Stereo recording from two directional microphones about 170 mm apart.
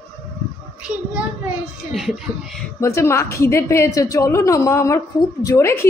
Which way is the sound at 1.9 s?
Centre (ahead or behind).